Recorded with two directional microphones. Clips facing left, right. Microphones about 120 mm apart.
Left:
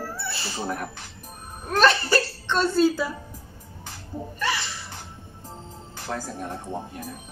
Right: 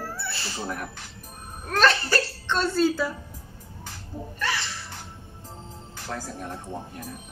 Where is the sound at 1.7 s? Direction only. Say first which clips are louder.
Left 2 dB; 10° left (ahead or behind).